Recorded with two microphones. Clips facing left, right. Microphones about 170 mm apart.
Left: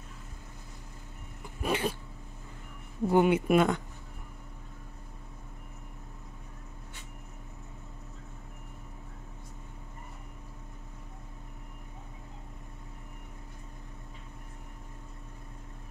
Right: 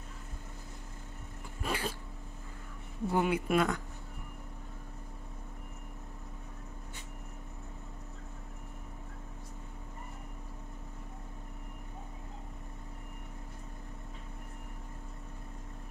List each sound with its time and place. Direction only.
1.6 s cat: 20° left (ahead or behind)
3.1 s speech: 25° left (ahead or behind)